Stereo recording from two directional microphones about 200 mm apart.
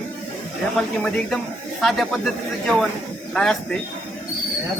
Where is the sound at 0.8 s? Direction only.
Centre (ahead or behind).